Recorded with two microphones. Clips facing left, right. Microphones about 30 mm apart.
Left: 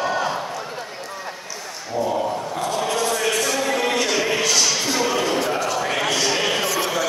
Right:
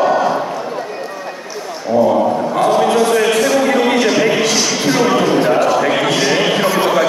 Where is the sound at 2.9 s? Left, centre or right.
Right.